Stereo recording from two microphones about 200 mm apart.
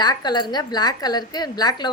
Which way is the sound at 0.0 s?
20° left (ahead or behind).